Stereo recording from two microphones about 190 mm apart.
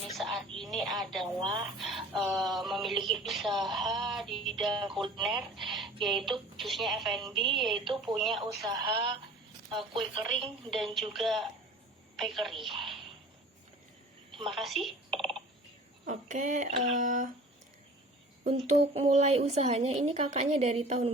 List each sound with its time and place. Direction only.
0.1 s a woman's voice: centre (ahead or behind)
1.3 s speech: 20° right (ahead or behind)
1.8 s speech: centre (ahead or behind)
4.9 s speech: 25° right (ahead or behind)
5.1 s speech: centre (ahead or behind)
8.6 s speech: 20° right (ahead or behind)
10.7 s a woman's voice: centre (ahead or behind)
14.4 s speech: centre (ahead or behind)
16.0 s a woman's voice: 40° right (ahead or behind)
18.4 s a woman's voice: 35° right (ahead or behind)